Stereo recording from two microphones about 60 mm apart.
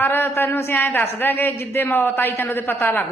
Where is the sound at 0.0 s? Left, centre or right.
Left.